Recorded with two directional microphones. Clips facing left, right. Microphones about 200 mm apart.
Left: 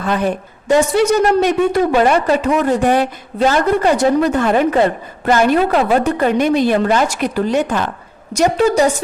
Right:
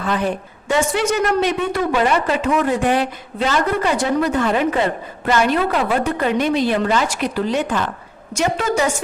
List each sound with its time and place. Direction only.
0.0 s a woman's voice: 45° left (ahead or behind)